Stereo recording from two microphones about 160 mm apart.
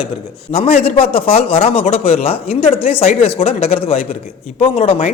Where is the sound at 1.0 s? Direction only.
35° left (ahead or behind).